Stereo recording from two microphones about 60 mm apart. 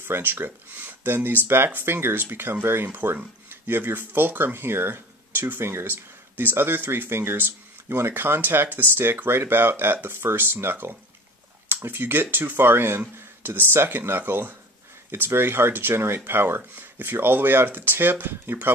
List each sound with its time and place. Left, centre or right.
0.0 s speech: right